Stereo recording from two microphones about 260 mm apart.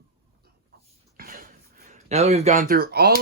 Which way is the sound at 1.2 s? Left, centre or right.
Right.